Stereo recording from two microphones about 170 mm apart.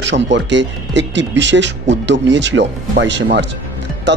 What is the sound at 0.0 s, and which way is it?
Speech, 90° right.